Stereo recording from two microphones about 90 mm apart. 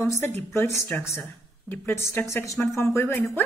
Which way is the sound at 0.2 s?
25° left (ahead or behind).